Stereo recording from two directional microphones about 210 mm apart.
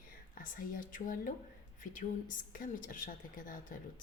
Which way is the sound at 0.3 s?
40° left (ahead or behind).